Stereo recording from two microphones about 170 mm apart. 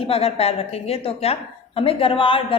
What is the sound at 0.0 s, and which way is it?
A woman's voice, 35° left (ahead or behind).